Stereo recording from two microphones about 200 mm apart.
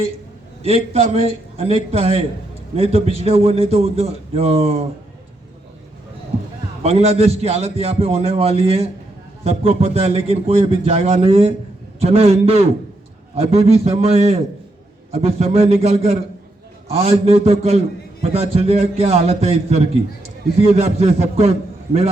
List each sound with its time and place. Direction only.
0.6 s a man's voice: 30° right (ahead or behind)
6.8 s a man's voice: 30° right (ahead or behind)